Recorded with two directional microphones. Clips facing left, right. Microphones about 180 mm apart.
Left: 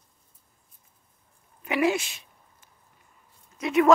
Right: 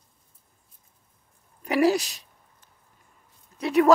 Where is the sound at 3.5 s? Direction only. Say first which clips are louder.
Right 1 dB; 35° right (ahead or behind).